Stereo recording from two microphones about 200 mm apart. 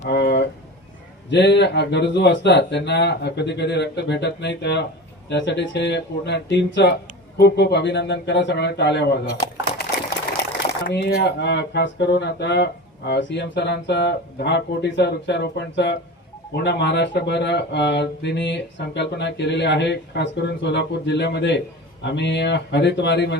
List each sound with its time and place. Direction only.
0.1 s a sound: 55° left (ahead or behind)
1.3 s speech: 60° left (ahead or behind)
10.8 s speech: 60° left (ahead or behind)